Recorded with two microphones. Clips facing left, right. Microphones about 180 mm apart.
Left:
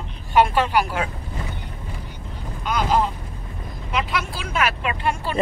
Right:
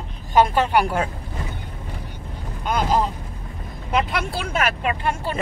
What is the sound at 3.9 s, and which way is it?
Speech, 50° right (ahead or behind).